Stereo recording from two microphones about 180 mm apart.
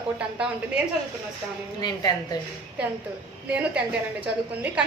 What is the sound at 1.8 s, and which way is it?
Speech, 20° left (ahead or behind).